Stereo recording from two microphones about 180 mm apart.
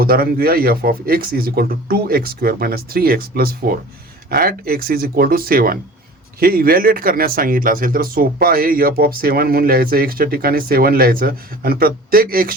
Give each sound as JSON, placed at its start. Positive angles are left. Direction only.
{"t": 0.0, "sound": "speech", "side_deg": -55}